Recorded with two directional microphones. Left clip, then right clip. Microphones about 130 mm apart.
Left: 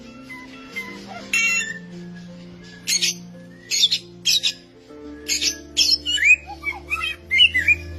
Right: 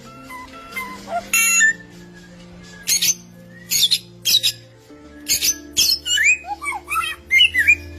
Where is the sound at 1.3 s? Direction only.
55° right (ahead or behind).